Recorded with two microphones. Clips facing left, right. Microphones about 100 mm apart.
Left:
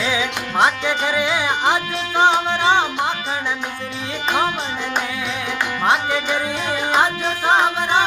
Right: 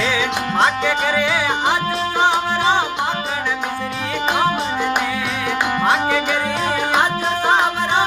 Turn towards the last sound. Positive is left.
turn(degrees=20)  # may be behind; listen again after turning